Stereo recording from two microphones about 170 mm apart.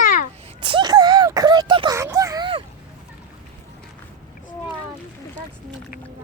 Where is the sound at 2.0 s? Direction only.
15° right (ahead or behind).